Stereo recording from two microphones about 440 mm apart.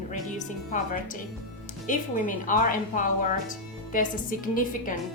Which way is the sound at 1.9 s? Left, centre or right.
Centre.